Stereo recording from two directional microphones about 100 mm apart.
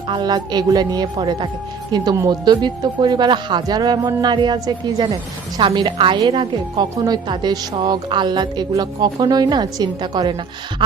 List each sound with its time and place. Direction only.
0.1 s speech: 45° right (ahead or behind)